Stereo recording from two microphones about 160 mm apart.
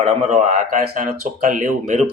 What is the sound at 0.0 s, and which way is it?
Speech, 45° right (ahead or behind).